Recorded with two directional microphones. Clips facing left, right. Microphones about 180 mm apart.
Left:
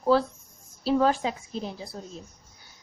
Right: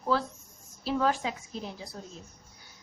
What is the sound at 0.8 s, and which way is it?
Speech, 30° left (ahead or behind).